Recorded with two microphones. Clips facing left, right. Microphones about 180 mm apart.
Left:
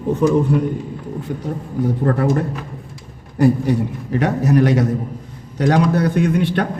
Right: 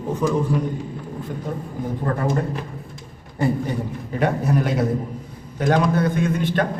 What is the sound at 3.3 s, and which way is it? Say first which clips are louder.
A man's voice: left 7 dB; 75° left (ahead or behind).